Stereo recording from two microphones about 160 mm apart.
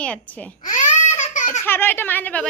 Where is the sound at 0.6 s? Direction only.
50° left (ahead or behind).